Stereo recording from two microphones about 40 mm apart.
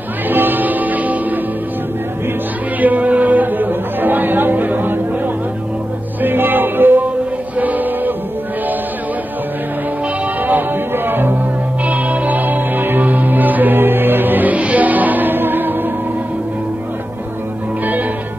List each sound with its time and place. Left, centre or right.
0.3 s music: right
2.8 s music: right
6.2 s music: right
7.5 s music: right
10.4 s music: right
11.8 s music: right